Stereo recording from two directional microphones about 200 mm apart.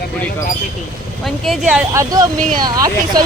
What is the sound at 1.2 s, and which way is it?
A woman's voice, centre (ahead or behind).